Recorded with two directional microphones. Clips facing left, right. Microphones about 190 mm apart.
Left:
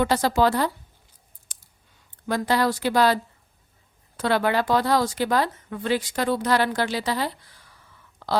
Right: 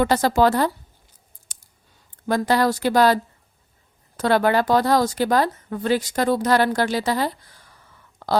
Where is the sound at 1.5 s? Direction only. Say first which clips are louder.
Right 2 dB; 45° right (ahead or behind).